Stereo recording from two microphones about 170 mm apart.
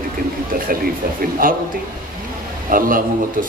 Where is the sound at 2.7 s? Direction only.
55° right (ahead or behind).